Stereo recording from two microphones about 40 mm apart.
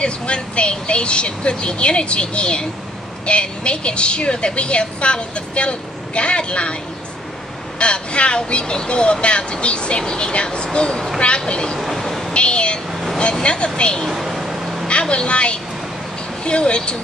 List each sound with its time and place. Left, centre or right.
0.0 s a woman's voice: left
7.8 s a woman's voice: left
11.8 s vehicle: centre
12.4 s a sound: left
13.3 s a woman's voice: left
14.0 s owl: centre
14.9 s a woman's voice: left